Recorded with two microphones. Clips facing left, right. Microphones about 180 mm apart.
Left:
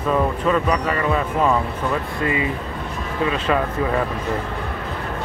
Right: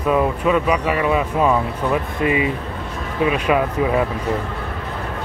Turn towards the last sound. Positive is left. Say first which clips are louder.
# right 3 dB
turn(degrees=-15)  # may be behind; listen again after turning